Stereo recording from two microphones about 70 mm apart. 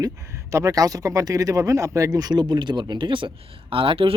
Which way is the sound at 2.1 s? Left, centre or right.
Right.